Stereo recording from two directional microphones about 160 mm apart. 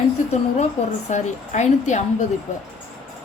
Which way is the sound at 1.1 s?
45° left (ahead or behind).